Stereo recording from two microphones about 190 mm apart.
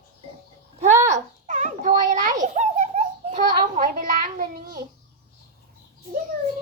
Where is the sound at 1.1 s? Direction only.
35° right (ahead or behind).